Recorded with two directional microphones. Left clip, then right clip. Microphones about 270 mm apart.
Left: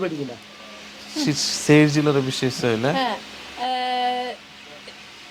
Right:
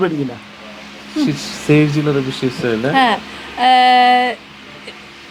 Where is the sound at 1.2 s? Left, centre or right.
Left.